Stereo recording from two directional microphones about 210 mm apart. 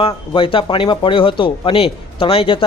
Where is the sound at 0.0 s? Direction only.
25° left (ahead or behind).